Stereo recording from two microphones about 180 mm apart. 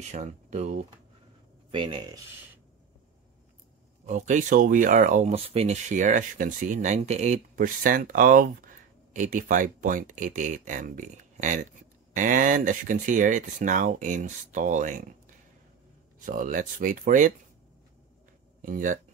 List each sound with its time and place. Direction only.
0.0 s speech: 40° right (ahead or behind)
1.7 s speech: 25° right (ahead or behind)
4.1 s speech: 45° right (ahead or behind)
16.2 s speech: 50° right (ahead or behind)
18.6 s speech: 50° right (ahead or behind)